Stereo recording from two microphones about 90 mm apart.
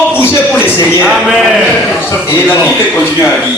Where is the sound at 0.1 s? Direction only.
25° left (ahead or behind).